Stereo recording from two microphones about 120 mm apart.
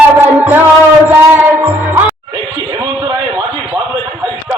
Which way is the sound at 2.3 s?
35° right (ahead or behind).